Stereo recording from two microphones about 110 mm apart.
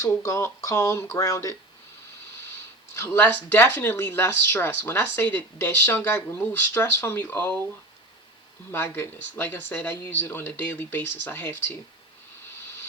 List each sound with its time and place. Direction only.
0.2 s speech: 30° left (ahead or behind)
2.9 s speech: 15° left (ahead or behind)
8.7 s speech: 20° left (ahead or behind)